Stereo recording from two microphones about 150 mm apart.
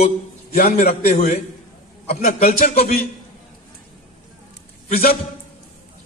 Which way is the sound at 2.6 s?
50° left (ahead or behind).